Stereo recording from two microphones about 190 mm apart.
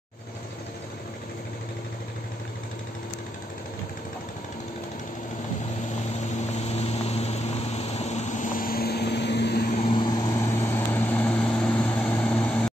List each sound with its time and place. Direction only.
6.3 s vehicle: 35° left (ahead or behind); by 9.8 s 55° left (ahead or behind)
9.9 s vehicle: 20° left (ahead or behind)